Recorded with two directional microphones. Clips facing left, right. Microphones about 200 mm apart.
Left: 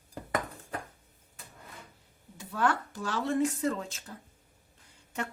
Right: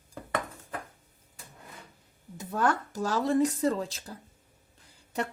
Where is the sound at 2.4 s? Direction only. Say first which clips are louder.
Right 2 dB; 40° right (ahead or behind).